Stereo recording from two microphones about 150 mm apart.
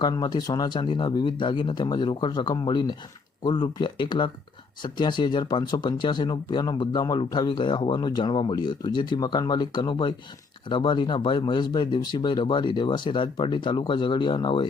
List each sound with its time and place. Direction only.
0.0 s speech: 30° left (ahead or behind)